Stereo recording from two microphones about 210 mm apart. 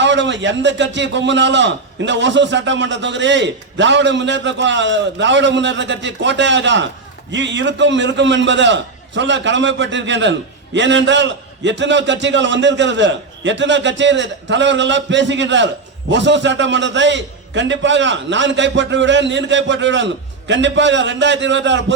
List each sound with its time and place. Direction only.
0.0 s a man's voice: 60° right (ahead or behind)